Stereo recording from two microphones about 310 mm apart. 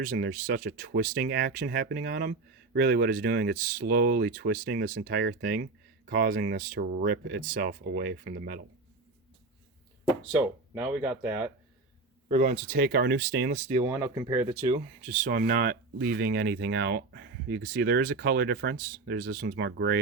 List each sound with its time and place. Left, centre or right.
0.0 s speech: right
10.3 s speech: centre
12.3 s speech: right
13.9 s speech: centre
15.0 s speech: right